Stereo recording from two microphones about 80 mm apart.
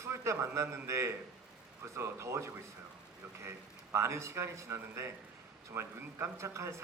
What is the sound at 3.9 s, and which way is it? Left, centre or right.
A man's voice, right.